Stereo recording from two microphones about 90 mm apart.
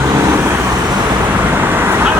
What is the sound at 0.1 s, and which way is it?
Vehicle, 30° right (ahead or behind).